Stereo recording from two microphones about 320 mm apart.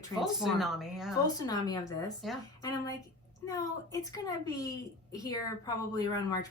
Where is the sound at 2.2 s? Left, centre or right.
Centre.